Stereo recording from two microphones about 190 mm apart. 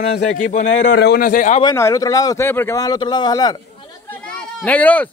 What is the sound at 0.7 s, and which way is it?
Speech, 70° left (ahead or behind).